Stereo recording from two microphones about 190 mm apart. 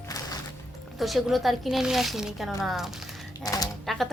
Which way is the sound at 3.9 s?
Centre (ahead or behind).